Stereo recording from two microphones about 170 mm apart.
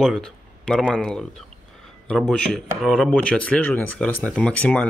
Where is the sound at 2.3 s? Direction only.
Centre (ahead or behind).